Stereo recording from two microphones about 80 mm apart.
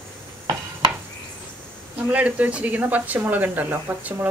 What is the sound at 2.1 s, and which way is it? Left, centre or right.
Speech, centre.